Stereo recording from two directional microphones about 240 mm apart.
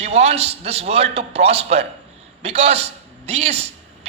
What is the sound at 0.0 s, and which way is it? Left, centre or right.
A man's voice, right.